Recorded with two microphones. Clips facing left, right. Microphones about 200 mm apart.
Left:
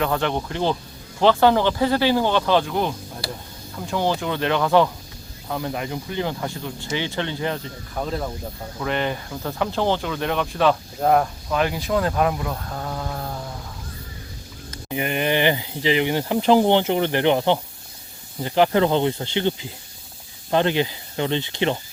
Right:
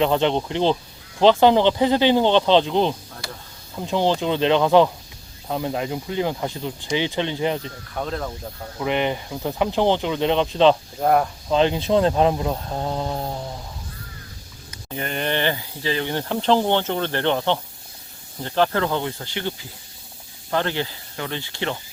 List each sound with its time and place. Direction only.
0.0 s speech: 20° right (ahead or behind)
3.2 s a sound: 35° left (ahead or behind)
3.8 s speech: 20° right (ahead or behind)
7.9 s speech: 5° left (ahead or behind)
8.8 s speech: 15° right (ahead or behind)
11.0 s speech: centre (ahead or behind)
11.4 s speech: 25° right (ahead or behind)
14.8 s speech: 10° left (ahead or behind)